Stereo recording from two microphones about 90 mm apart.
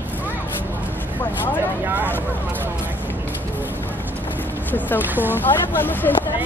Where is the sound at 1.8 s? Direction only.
20° right (ahead or behind).